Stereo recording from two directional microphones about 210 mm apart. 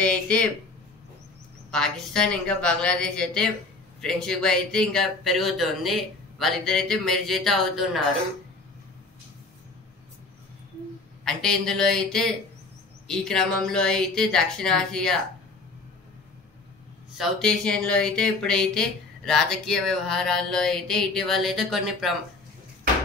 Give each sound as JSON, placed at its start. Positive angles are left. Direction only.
{"t": 0.0, "sound": "speech", "side_deg": 5}
{"t": 1.7, "sound": "speech", "side_deg": 5}
{"t": 11.2, "sound": "speech", "side_deg": 0}
{"t": 17.2, "sound": "speech", "side_deg": 5}